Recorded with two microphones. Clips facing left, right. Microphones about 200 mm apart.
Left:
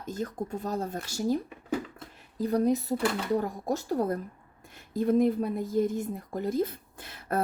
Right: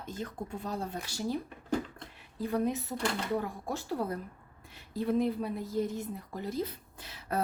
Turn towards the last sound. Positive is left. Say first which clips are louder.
# left 4 dB
turn(degrees=50)  # may be behind; listen again after turning